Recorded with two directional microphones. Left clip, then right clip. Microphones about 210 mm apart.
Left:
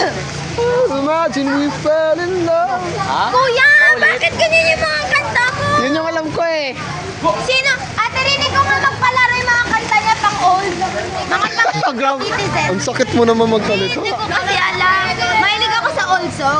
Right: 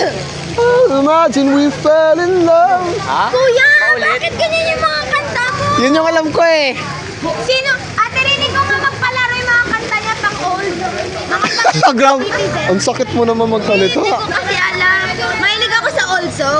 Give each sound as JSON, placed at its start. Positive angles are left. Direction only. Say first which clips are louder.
{"t": 1.0, "sound": "speech", "louder": "right 5 dB", "side_deg": -35}
{"t": 3.3, "sound": "speech", "louder": "right 1 dB", "side_deg": 20}
{"t": 5.8, "sound": "a man's voice", "louder": "right 5 dB", "side_deg": -45}
{"t": 7.4, "sound": "a child's voice", "louder": "right 1 dB", "side_deg": 15}
{"t": 9.1, "sound": "vehicle", "louder": "left 1 dB", "side_deg": 5}
{"t": 11.4, "sound": "a man's voice", "louder": "right 7 dB", "side_deg": -50}
{"t": 13.0, "sound": "speech", "louder": "left 1 dB", "side_deg": 10}
{"t": 13.8, "sound": "a man's voice", "louder": "right 5 dB", "side_deg": -50}
{"t": 14.3, "sound": "a sound", "louder": "right 1 dB", "side_deg": -15}